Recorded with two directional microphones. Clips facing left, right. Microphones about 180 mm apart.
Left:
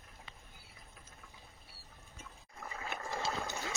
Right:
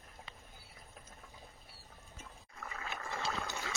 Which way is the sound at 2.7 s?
25° left (ahead or behind).